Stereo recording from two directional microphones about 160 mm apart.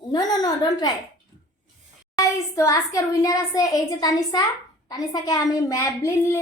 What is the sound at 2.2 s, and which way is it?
A child's voice, 20° left (ahead or behind).